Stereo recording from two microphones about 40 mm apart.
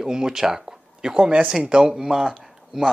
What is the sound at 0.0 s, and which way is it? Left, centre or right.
Speech, centre.